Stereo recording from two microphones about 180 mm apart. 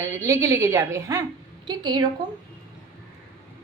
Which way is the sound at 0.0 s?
15° right (ahead or behind).